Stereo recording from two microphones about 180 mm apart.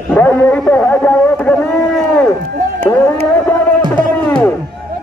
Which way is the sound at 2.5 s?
55° right (ahead or behind).